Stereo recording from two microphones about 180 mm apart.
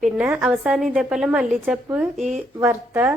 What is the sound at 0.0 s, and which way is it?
A woman's voice, 5° right (ahead or behind).